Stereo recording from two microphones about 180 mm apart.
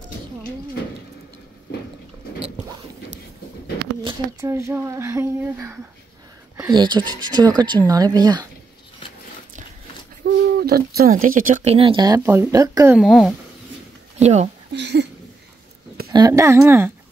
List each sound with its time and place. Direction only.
4.4 s speech: 15° right (ahead or behind)
6.7 s speech: 25° right (ahead or behind)
10.2 s a sound: 90° right
10.6 s speech: 60° right (ahead or behind); by 12.9 s 20° right (ahead or behind)
12.9 s speech: centre (ahead or behind)
14.2 s speech: 40° right (ahead or behind)
14.7 s speech: 75° right (ahead or behind)
16.1 s speech: 20° right (ahead or behind)